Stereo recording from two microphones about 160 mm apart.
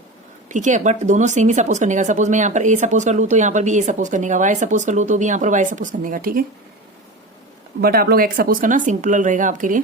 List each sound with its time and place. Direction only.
0.4 s speech: 50° right (ahead or behind)
7.8 s speech: 70° right (ahead or behind); by 9.8 s 55° right (ahead or behind)